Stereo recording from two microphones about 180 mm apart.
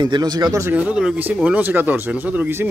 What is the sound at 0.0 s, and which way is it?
Speech, 20° right (ahead or behind).